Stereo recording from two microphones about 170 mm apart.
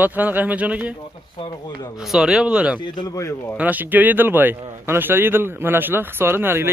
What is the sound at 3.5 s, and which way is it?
Speech, 10° right (ahead or behind).